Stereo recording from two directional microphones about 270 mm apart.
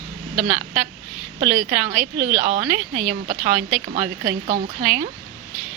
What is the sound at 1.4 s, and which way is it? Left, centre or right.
Speech, right.